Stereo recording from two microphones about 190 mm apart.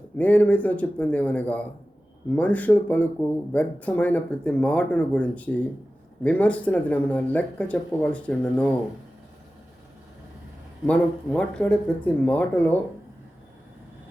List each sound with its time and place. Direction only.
0.2 s speech: 10° left (ahead or behind)
10.8 s speech: 5° left (ahead or behind)